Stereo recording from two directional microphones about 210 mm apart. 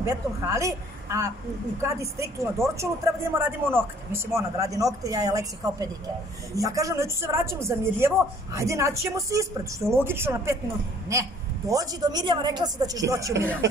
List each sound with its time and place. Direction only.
0.0 s speech: 15° right (ahead or behind)